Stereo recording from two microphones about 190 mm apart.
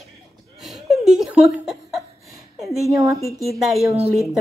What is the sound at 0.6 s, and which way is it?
Laughter, centre (ahead or behind).